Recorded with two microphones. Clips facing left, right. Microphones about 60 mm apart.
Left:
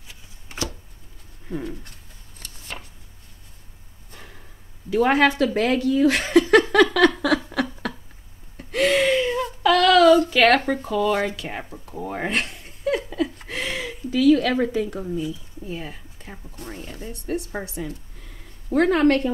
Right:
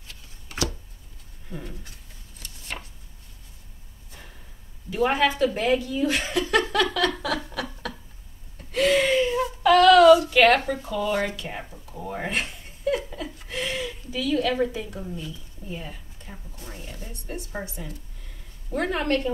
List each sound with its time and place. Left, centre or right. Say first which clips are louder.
4.8 s speech: left 4 dB; left
7.2 s a sound: left 7 dB; left
12.1 s laughter: left 3 dB; left
15.7 s speech: left 3 dB; left